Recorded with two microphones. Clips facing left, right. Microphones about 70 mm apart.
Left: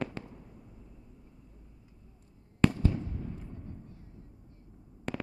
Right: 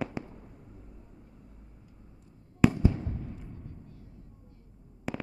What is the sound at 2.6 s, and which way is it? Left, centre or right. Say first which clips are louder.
Fireworks: right 3 dB; right.